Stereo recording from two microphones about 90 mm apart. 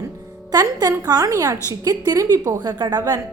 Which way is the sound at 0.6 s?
40° right (ahead or behind).